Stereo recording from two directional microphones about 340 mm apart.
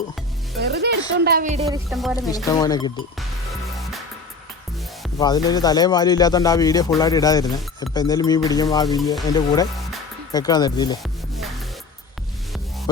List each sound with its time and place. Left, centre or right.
0.6 s speech: right
1.9 s speech: centre
5.1 s speech: centre